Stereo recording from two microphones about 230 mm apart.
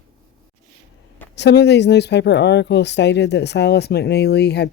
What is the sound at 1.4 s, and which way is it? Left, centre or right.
Speech, left.